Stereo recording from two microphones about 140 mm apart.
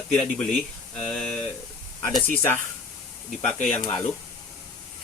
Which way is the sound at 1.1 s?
5° left (ahead or behind).